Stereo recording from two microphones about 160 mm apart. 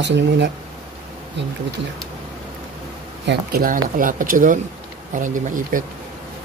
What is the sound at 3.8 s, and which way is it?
Speech, 60° right (ahead or behind).